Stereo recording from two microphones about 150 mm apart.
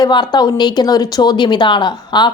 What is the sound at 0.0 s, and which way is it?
Speech, 30° left (ahead or behind).